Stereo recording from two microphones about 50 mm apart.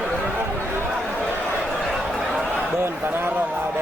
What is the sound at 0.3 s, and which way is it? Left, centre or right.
Chatter, right.